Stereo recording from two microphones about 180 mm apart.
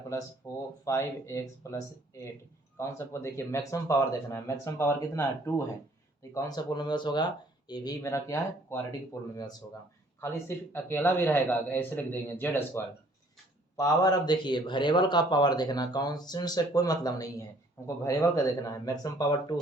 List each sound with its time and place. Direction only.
0.4 s a man's voice: 15° left (ahead or behind)